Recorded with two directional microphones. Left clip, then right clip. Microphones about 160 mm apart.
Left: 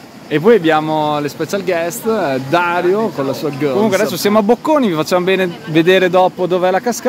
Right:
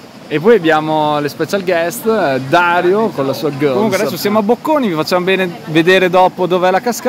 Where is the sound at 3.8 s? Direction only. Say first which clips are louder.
Left 1 dB; 25° left (ahead or behind); by 7.1 s 10° left (ahead or behind).